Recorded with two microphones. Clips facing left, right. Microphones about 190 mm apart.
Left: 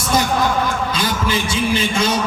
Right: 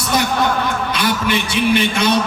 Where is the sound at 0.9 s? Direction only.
65° right (ahead or behind).